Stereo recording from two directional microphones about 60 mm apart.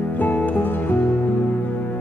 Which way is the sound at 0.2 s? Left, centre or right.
Left.